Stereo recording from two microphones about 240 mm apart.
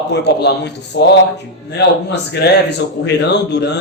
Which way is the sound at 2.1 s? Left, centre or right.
Left.